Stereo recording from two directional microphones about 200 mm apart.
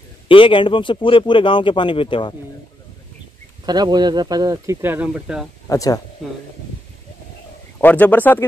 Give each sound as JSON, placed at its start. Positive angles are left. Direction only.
{"t": 0.3, "sound": "speech", "side_deg": 25}
{"t": 3.6, "sound": "speech", "side_deg": -20}
{"t": 5.7, "sound": "speech", "side_deg": 15}
{"t": 7.8, "sound": "speech", "side_deg": 10}